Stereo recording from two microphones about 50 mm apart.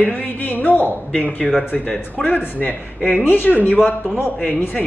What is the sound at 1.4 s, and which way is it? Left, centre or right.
Speech, centre.